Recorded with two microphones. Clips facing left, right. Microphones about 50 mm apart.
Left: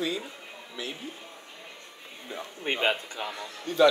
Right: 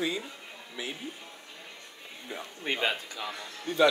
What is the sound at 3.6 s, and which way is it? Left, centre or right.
Speech, centre.